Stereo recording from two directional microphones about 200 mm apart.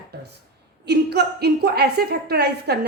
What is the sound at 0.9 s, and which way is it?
A woman's voice, 55° right (ahead or behind).